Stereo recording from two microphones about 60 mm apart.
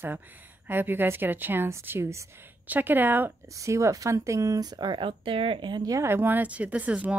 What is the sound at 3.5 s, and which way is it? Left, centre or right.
Speech, right.